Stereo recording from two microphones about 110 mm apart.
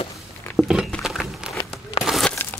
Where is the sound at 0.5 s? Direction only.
5° right (ahead or behind).